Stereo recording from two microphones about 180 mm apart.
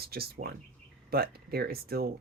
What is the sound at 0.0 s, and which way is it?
Speech, 60° right (ahead or behind).